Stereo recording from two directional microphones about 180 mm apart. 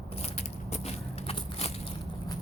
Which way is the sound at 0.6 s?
35° left (ahead or behind).